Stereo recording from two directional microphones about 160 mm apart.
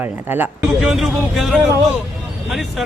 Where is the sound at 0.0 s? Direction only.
10° right (ahead or behind).